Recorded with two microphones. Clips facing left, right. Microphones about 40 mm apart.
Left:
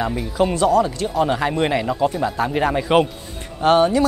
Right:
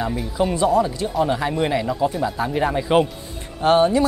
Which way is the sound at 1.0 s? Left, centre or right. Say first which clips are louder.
Left 1 dB; centre.